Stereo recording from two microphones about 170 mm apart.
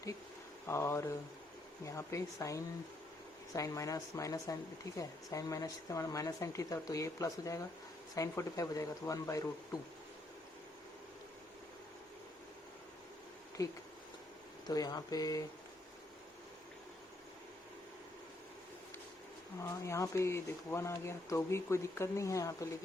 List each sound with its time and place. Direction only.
0.7 s speech: 15° left (ahead or behind)
14.7 s speech: 25° left (ahead or behind)
19.8 s speech: 15° left (ahead or behind)